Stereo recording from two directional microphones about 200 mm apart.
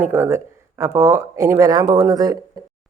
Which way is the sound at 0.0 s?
10° right (ahead or behind).